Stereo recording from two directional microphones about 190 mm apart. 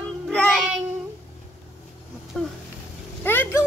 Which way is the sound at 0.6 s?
5° right (ahead or behind).